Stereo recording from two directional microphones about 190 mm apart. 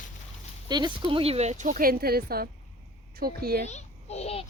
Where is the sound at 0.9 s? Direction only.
25° right (ahead or behind); by 3.7 s 55° right (ahead or behind).